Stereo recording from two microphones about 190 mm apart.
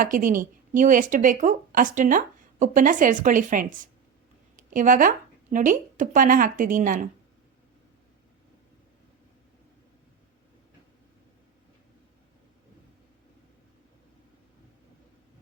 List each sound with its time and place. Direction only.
0.0 s a woman's voice: 45° right (ahead or behind)